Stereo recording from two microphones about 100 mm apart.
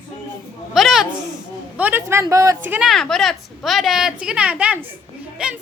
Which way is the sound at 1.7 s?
15° right (ahead or behind).